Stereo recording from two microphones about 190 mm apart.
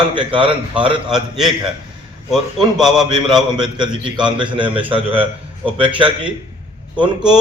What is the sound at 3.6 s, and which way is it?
A man's voice, 25° right (ahead or behind).